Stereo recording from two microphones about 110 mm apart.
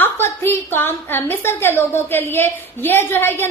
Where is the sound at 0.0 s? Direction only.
20° left (ahead or behind).